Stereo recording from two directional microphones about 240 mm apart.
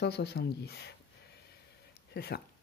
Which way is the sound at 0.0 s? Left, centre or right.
Left.